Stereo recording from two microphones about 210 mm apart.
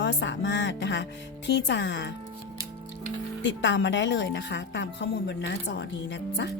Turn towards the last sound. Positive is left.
turn(degrees=55)  # may be behind; listen again after turning